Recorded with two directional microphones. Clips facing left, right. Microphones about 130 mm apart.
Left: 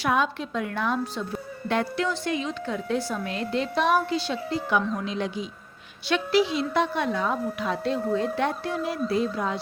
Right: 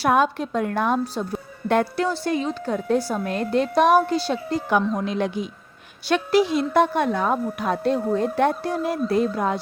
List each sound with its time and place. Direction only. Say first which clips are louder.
0.0 s a woman's voice: right 5 dB; 45° right (ahead or behind)